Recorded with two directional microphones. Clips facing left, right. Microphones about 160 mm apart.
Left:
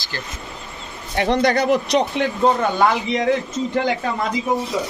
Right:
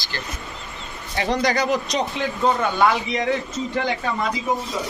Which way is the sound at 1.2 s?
55° left (ahead or behind).